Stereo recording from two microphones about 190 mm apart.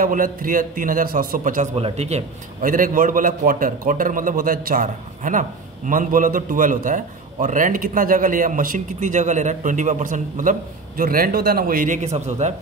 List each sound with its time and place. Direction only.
0.0 s a man's voice: 45° right (ahead or behind)
1.8 s a man's voice: 35° right (ahead or behind)